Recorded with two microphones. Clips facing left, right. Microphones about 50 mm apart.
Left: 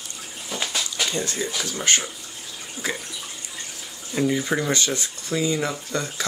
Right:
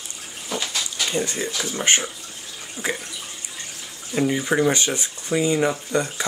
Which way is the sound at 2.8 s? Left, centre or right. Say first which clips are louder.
Right 2 dB; right.